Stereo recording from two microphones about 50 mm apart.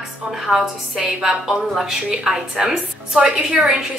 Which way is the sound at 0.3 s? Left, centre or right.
Centre.